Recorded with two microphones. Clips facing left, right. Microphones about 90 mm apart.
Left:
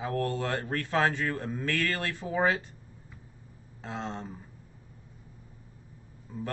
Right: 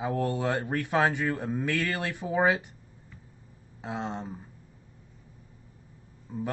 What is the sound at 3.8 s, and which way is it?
Speech, 15° right (ahead or behind).